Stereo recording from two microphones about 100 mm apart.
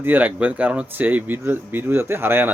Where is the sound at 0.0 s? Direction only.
20° right (ahead or behind).